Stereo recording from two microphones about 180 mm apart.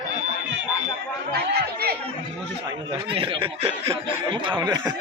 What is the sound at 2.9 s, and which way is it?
Speech, 30° right (ahead or behind).